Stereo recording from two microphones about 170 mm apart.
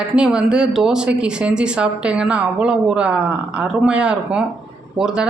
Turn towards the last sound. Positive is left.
turn(degrees=-5)  # may be behind; listen again after turning